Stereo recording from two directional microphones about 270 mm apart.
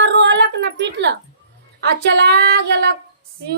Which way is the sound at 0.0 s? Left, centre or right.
Right.